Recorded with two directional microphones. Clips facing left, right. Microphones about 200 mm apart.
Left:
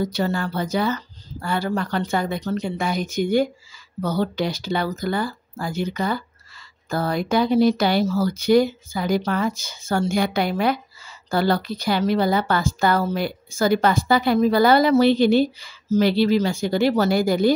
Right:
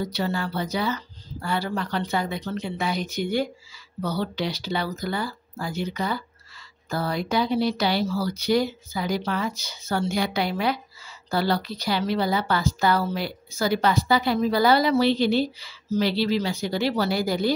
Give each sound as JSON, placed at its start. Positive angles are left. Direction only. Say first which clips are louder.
{"t": 0.0, "sound": "a woman's voice", "louder": "left 4 dB", "side_deg": 45}